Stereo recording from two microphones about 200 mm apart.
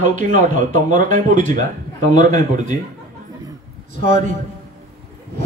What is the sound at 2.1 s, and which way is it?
Speech, 40° right (ahead or behind).